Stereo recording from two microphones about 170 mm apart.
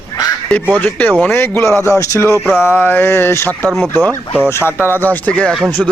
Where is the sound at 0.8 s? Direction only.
10° left (ahead or behind).